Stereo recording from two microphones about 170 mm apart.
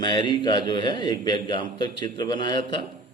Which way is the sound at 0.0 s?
25° left (ahead or behind).